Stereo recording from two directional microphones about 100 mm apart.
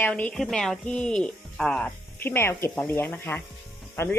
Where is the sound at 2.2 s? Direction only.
20° left (ahead or behind).